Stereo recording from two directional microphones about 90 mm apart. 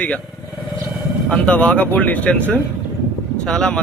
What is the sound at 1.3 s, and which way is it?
Speech, 15° left (ahead or behind).